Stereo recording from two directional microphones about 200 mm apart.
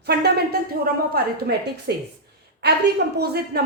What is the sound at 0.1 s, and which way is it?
A woman's voice, 55° right (ahead or behind).